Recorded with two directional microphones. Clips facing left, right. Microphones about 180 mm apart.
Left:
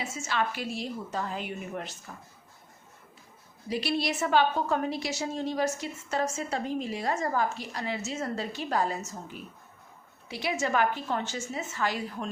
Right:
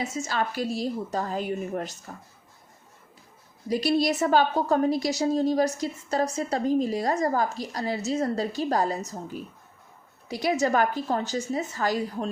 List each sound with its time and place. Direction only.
0.0 s a woman's voice: 40° right (ahead or behind)
3.7 s a woman's voice: 40° right (ahead or behind)